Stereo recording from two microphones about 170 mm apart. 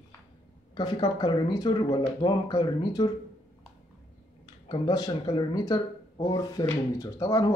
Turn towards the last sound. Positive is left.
turn(degrees=20)  # may be behind; listen again after turning